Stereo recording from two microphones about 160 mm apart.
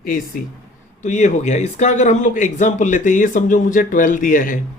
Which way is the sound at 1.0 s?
50° left (ahead or behind).